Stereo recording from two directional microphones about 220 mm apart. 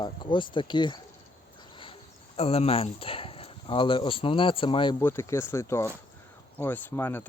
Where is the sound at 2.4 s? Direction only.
25° left (ahead or behind).